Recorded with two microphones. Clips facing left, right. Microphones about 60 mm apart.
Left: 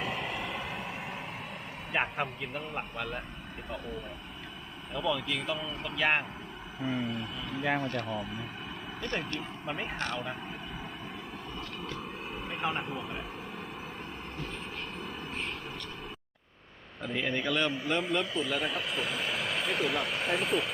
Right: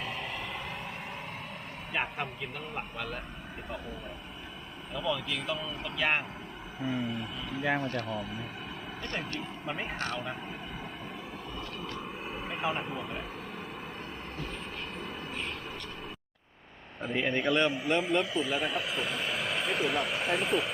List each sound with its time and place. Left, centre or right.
0.0 s train: centre
1.9 s a man's voice: centre
4.9 s a man's voice: centre
11.9 s speech: centre
14.9 s vehicle: centre
17.0 s a man's voice: centre